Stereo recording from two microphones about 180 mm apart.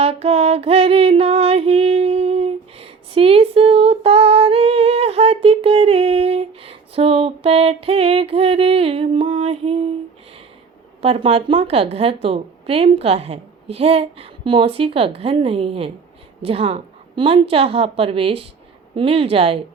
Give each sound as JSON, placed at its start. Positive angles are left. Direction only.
{"t": 0.0, "sound": "female singing", "side_deg": -35}
{"t": 11.0, "sound": "a woman's voice", "side_deg": -35}